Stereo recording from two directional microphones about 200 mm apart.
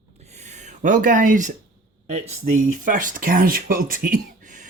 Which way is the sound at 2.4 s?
40° right (ahead or behind).